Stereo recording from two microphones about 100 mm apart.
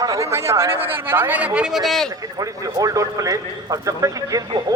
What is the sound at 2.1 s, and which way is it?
A man's voice, 35° right (ahead or behind).